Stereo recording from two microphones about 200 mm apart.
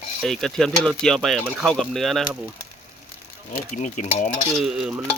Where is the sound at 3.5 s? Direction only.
40° left (ahead or behind).